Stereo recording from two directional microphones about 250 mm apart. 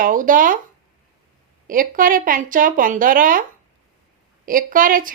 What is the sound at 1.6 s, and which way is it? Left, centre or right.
Speech, right.